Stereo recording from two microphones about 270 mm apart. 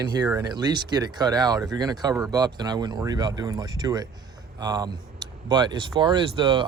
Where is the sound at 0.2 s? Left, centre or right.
Centre.